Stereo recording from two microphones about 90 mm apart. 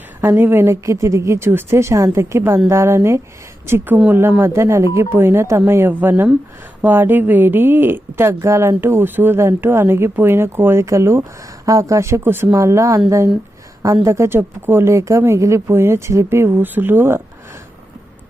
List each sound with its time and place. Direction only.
0.2 s a woman's voice: 25° right (ahead or behind)